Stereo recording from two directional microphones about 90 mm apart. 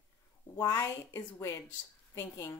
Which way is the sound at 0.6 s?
40° left (ahead or behind).